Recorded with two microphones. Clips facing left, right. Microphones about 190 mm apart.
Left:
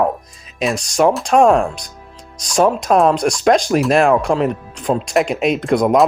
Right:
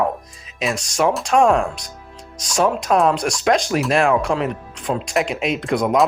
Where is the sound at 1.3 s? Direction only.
40° left (ahead or behind).